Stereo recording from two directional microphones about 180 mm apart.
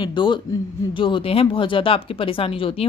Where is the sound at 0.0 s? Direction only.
25° left (ahead or behind).